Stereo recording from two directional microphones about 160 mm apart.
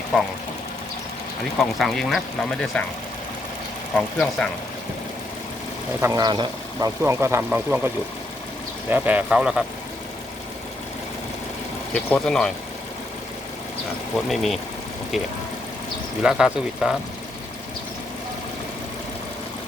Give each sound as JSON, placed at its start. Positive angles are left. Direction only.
{"t": 0.1, "sound": "speech", "side_deg": 0}
{"t": 1.5, "sound": "speech", "side_deg": 0}
{"t": 3.9, "sound": "speech", "side_deg": 5}
{"t": 6.0, "sound": "speech", "side_deg": -20}
{"t": 8.9, "sound": "speech", "side_deg": -10}
{"t": 11.9, "sound": "speech", "side_deg": 5}
{"t": 14.3, "sound": "speech", "side_deg": 0}
{"t": 16.2, "sound": "speech", "side_deg": -5}